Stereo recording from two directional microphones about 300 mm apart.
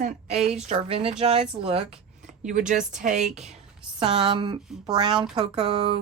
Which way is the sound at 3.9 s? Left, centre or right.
Centre.